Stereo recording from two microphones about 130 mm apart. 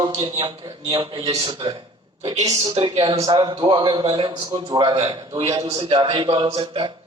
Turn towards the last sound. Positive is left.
turn(degrees=-40)  # may be behind; listen again after turning